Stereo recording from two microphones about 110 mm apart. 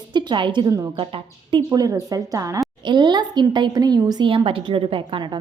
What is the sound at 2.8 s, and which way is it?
A woman's voice, 45° right (ahead or behind).